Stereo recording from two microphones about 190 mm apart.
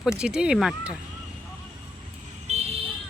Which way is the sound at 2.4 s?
35° right (ahead or behind).